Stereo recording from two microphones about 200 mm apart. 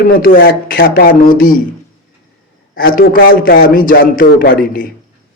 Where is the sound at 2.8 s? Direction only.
50° left (ahead or behind).